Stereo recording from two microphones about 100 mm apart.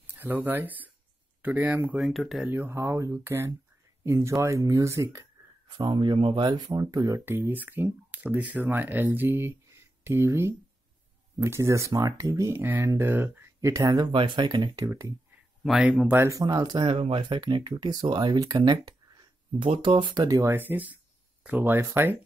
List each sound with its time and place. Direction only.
0.1 s speech: 20° right (ahead or behind)
2.0 s speech: centre (ahead or behind)
2.5 s speech: 25° right (ahead or behind)
5.7 s speech: 50° right (ahead or behind)
7.2 s speech: 20° right (ahead or behind)
14.1 s speech: 55° right (ahead or behind)
14.5 s speech: 35° right (ahead or behind)
15.6 s speech: 5° right (ahead or behind)
16.1 s speech: 30° right (ahead or behind); by 16.9 s 45° right (ahead or behind)
16.9 s speech: 65° right (ahead or behind); by 19.2 s 45° right (ahead or behind)
19.6 s speech: 60° right (ahead or behind)
20.2 s speech: 35° right (ahead or behind)
20.5 s speech: 20° right (ahead or behind)